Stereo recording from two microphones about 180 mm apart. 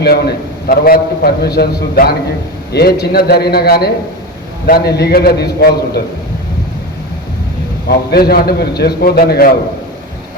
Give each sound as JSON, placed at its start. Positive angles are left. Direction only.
{"t": 0.0, "sound": "a man's voice", "side_deg": 60}
{"t": 7.9, "sound": "a man's voice", "side_deg": 60}